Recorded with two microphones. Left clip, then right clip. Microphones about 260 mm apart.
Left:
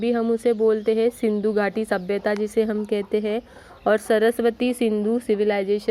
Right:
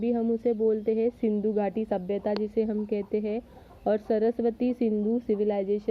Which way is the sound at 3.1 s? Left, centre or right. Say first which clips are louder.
Left 7 dB; left.